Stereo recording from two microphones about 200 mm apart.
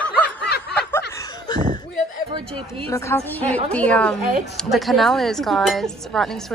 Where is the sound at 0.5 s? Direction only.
55° left (ahead or behind).